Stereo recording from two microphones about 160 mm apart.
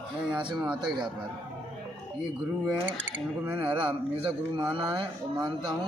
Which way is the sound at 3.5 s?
30° right (ahead or behind).